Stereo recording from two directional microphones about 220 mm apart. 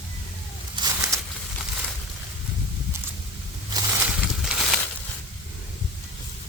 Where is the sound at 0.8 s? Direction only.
20° right (ahead or behind).